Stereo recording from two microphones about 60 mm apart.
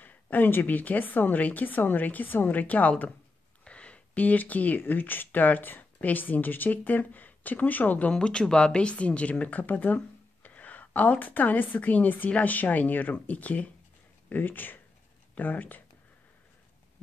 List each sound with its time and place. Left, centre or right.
0.0 s a woman's voice: left
8.1 s a woman's voice: centre